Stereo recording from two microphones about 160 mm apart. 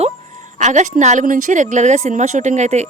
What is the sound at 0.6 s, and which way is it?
A woman's voice, 50° right (ahead or behind).